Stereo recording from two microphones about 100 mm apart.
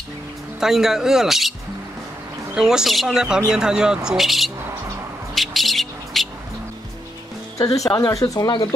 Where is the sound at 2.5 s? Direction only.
5° right (ahead or behind).